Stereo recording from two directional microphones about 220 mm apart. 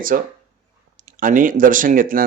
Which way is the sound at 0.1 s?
40° right (ahead or behind).